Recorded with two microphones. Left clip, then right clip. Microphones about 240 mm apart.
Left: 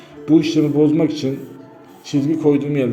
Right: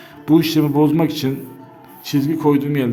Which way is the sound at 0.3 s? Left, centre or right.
Right.